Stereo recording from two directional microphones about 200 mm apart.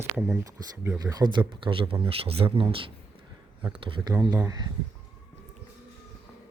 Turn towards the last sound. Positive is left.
turn(degrees=-15)  # may be behind; listen again after turning